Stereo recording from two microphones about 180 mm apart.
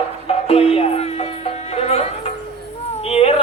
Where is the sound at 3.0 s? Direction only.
35° left (ahead or behind).